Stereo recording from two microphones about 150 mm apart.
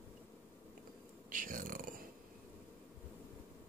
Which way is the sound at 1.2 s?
65° right (ahead or behind).